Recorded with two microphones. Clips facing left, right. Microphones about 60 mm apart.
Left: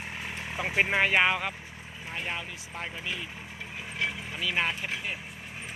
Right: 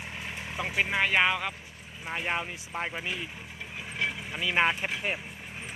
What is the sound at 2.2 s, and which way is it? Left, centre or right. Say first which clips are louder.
Speech: right 4 dB; right.